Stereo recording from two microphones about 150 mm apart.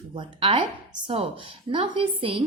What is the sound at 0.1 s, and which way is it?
A woman's voice, 35° right (ahead or behind).